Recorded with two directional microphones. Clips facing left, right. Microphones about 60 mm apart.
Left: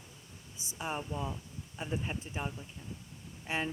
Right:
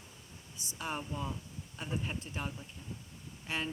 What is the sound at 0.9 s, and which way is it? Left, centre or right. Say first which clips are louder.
Speech: left 1 dB; centre.